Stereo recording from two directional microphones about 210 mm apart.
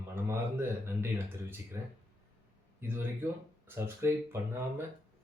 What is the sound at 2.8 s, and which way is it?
Speech, 10° right (ahead or behind).